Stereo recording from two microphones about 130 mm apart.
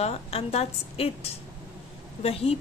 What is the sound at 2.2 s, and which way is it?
Speech, 50° left (ahead or behind).